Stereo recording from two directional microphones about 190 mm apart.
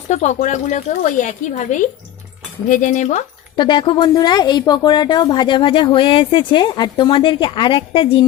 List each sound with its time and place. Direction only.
0.1 s speech: 35° left (ahead or behind)
3.6 s a woman's voice: 25° left (ahead or behind)